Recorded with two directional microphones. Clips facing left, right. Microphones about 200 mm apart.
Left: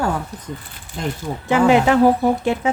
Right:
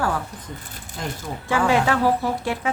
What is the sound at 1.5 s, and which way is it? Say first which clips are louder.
Speech: left 6 dB; 20° left (ahead or behind).